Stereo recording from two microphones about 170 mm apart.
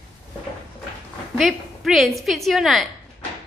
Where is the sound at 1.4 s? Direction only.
Centre (ahead or behind).